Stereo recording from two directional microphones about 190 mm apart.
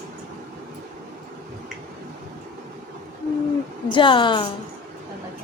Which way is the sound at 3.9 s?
25° left (ahead or behind).